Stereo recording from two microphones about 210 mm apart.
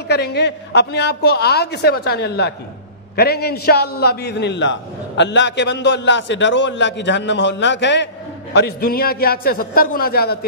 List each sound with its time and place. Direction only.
0.1 s a woman's voice: 50° left (ahead or behind)
8.5 s a woman's voice: 45° left (ahead or behind)